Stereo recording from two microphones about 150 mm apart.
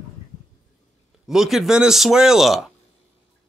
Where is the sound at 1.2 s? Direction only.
Centre (ahead or behind).